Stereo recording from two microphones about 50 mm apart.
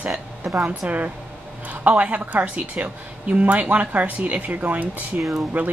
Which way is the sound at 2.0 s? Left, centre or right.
Right.